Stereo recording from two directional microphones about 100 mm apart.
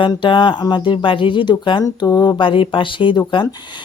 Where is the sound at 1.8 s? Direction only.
40° left (ahead or behind).